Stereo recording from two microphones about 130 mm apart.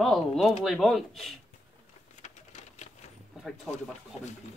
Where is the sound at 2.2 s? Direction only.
65° left (ahead or behind).